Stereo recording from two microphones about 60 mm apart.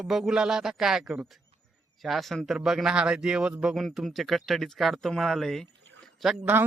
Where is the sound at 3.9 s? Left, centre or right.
Centre.